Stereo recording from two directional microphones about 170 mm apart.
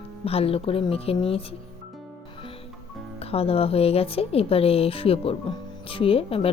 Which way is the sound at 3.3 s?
35° left (ahead or behind).